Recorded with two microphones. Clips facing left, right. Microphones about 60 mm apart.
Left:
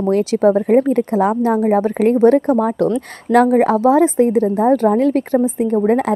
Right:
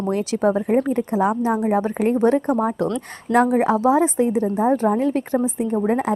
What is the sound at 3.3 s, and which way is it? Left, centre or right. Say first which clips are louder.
Speech: left 5 dB; left.